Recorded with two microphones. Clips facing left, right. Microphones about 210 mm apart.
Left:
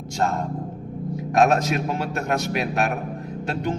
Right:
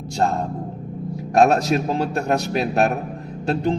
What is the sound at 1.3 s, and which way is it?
A man's voice, 35° right (ahead or behind).